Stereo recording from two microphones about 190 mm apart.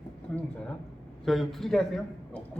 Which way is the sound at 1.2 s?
Centre (ahead or behind).